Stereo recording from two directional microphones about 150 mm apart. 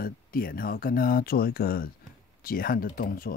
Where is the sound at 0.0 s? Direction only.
75° left (ahead or behind).